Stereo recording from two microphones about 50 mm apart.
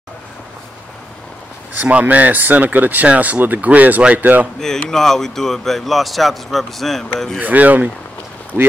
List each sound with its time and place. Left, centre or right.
1.8 s speech: right
4.6 s speech: centre
7.3 s speech: right
8.5 s speech: left